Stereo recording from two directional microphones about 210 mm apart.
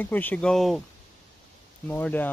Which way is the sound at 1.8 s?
10° left (ahead or behind).